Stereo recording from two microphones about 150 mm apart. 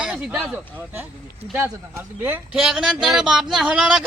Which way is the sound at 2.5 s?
5° right (ahead or behind).